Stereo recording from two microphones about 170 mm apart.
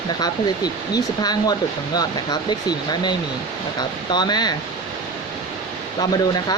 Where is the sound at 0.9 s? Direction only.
25° left (ahead or behind).